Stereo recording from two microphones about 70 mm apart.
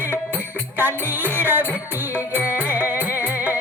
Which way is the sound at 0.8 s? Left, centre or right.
Right.